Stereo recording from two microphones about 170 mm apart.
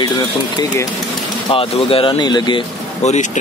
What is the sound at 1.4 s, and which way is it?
Speech, 35° left (ahead or behind).